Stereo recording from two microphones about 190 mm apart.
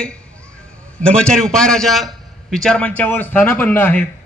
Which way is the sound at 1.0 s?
5° left (ahead or behind).